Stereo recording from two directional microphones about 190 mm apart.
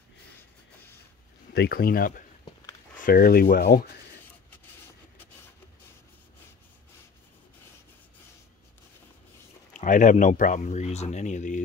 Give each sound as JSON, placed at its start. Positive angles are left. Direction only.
{"t": 1.5, "sound": "rub", "side_deg": 55}
{"t": 9.8, "sound": "speech", "side_deg": 40}